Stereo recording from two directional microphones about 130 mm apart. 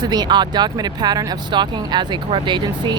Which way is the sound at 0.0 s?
35° right (ahead or behind).